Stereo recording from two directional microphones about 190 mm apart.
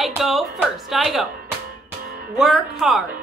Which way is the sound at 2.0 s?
50° right (ahead or behind).